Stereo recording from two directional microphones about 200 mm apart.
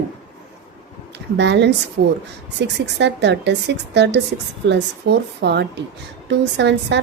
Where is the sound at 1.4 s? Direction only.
60° right (ahead or behind).